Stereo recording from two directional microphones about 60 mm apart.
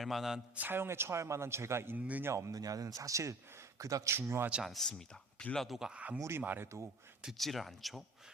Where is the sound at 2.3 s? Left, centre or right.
Right.